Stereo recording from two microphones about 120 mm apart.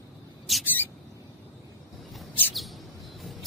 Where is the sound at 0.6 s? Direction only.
15° left (ahead or behind).